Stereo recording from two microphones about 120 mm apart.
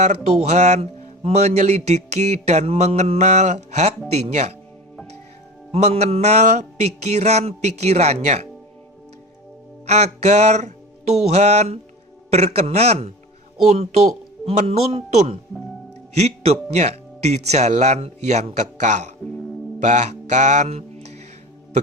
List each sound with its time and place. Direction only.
0.0 s a man's voice: 65° right (ahead or behind)
5.7 s a man's voice: 60° right (ahead or behind)
9.8 s music: 65° right (ahead or behind)
12.3 s a man's voice: 60° right (ahead or behind)